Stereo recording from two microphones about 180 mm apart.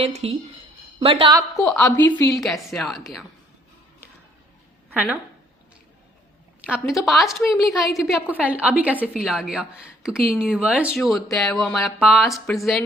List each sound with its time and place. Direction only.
0.0 s a woman's voice: 35° right (ahead or behind)
2.0 s a woman's voice: 15° left (ahead or behind)
2.4 s a woman's voice: centre (ahead or behind)
4.9 s a woman's voice: 10° right (ahead or behind)
6.7 s a woman's voice: centre (ahead or behind)